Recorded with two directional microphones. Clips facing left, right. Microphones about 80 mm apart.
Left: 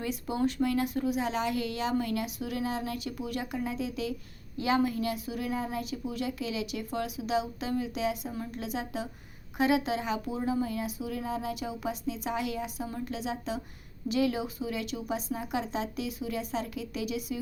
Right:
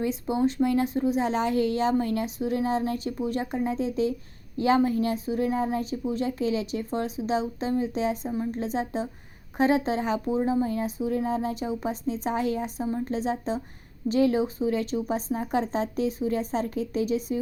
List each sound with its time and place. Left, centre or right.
0.0 s speech: right